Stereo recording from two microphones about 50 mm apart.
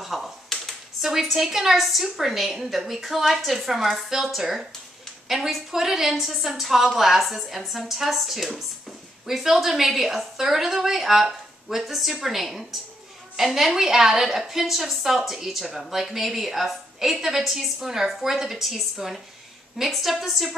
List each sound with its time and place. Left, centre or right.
0.0 s a woman's voice: centre